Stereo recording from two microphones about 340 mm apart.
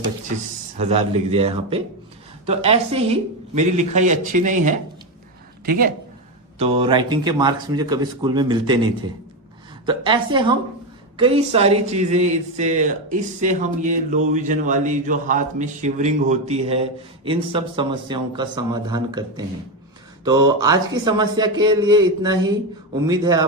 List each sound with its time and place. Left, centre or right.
0.8 s a man's voice: centre
6.6 s a man's voice: centre